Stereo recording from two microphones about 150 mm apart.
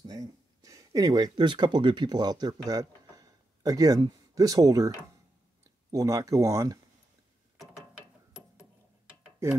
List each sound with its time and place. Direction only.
0.0 s speech: 25° right (ahead or behind)
9.4 s speech: 20° right (ahead or behind)